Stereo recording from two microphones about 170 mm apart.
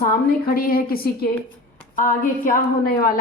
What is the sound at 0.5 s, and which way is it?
A woman's voice, 60° left (ahead or behind).